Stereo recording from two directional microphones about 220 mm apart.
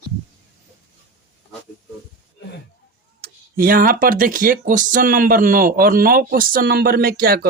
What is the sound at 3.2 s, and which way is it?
Speech, 40° right (ahead or behind).